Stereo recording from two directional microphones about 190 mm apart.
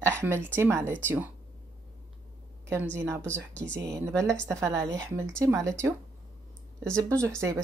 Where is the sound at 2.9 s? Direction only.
15° right (ahead or behind).